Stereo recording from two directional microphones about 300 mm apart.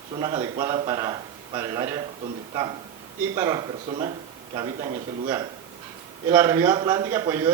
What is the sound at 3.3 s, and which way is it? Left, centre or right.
Speech, centre.